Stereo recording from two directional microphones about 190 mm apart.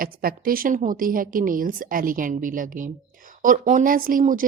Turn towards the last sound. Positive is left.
turn(degrees=-45)  # may be behind; listen again after turning